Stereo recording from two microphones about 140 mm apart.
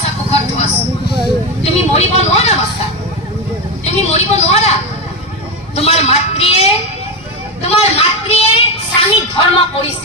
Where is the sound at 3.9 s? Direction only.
50° left (ahead or behind).